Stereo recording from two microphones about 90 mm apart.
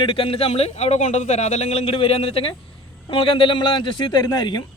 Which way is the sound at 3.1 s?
75° left (ahead or behind).